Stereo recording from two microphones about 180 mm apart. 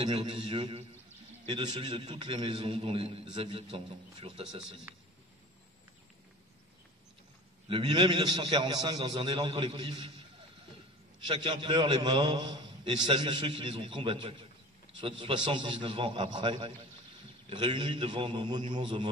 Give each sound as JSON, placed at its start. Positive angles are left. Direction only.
{"t": 0.0, "sound": "a man's voice", "side_deg": -25}
{"t": 4.6, "sound": "a man's voice", "side_deg": -5}
{"t": 7.6, "sound": "a man's voice", "side_deg": -25}
{"t": 11.2, "sound": "a man's voice", "side_deg": -25}